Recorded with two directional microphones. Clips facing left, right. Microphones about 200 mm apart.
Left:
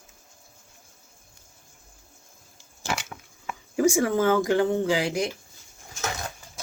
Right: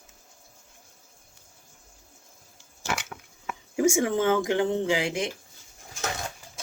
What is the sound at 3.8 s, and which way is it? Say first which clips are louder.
Speech: left 2 dB; 20° right (ahead or behind).